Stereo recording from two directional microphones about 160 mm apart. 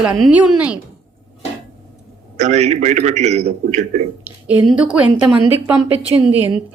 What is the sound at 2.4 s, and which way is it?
A man's voice, 45° right (ahead or behind).